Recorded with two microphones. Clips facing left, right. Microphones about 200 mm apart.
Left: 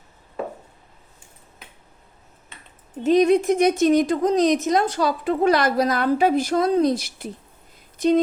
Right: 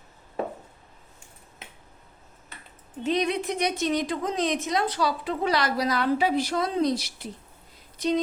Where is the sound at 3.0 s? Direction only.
45° left (ahead or behind).